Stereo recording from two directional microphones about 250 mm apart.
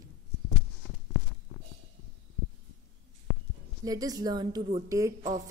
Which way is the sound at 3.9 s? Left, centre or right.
Centre.